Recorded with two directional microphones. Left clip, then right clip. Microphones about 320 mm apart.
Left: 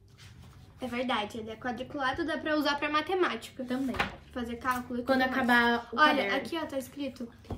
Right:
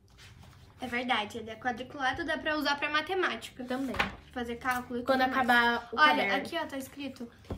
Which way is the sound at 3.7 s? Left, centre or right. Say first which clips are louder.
Even; centre.